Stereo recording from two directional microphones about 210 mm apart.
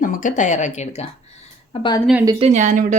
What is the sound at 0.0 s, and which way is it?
Speech, 40° left (ahead or behind).